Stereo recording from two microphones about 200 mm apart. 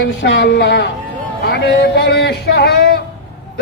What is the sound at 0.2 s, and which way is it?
Speech, 60° left (ahead or behind).